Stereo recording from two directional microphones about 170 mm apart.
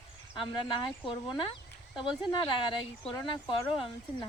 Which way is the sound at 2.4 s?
25° left (ahead or behind).